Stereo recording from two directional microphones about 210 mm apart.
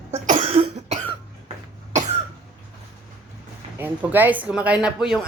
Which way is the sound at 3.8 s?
10° right (ahead or behind).